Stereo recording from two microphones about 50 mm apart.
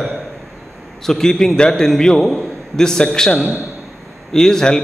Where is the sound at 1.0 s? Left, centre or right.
Centre.